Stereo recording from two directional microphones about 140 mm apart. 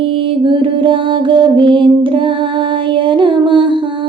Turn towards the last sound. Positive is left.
turn(degrees=-35)  # may be behind; listen again after turning